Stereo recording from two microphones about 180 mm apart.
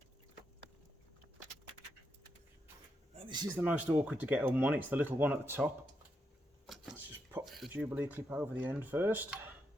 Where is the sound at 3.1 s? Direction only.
30° right (ahead or behind).